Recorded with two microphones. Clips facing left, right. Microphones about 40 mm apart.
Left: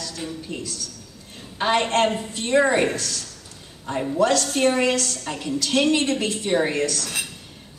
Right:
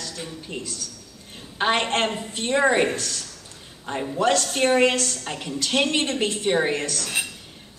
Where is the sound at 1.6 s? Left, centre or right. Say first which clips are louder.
Left 2 dB; right.